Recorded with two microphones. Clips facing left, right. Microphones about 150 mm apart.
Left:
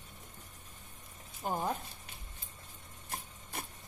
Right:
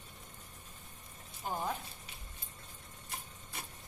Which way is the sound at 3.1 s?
50° left (ahead or behind).